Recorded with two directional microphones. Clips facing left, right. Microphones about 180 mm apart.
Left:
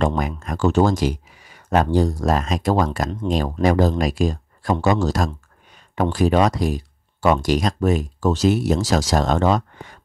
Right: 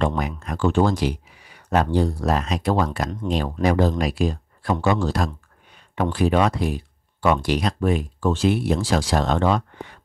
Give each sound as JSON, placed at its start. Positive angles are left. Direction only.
{"t": 0.0, "sound": "speech", "side_deg": 45}